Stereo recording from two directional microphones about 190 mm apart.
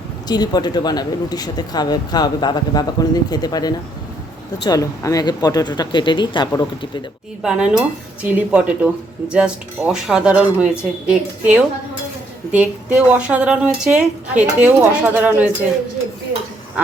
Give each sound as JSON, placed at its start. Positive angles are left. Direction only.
{"t": 0.3, "sound": "speech", "side_deg": 20}
{"t": 7.4, "sound": "speech", "side_deg": -5}